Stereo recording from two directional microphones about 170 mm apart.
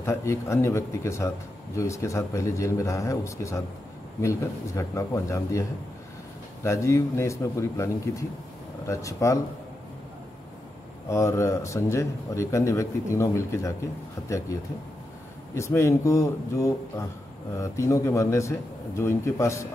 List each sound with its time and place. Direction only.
0.0 s speech: 15° left (ahead or behind)
6.6 s speech: 15° left (ahead or behind)
11.1 s speech: 15° left (ahead or behind)
15.5 s speech: 15° left (ahead or behind)